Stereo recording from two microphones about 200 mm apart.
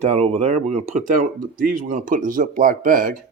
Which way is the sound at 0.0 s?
35° right (ahead or behind).